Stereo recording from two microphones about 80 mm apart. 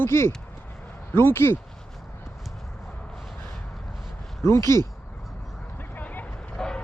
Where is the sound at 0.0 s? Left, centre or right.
Left.